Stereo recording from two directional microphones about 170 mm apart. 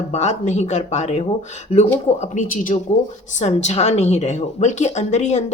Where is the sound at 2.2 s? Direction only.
45° left (ahead or behind).